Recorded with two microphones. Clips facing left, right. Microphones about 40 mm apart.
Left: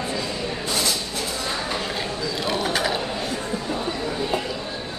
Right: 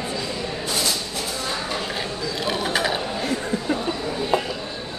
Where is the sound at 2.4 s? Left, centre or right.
Centre.